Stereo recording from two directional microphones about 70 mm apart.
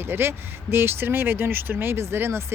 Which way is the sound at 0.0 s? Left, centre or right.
Right.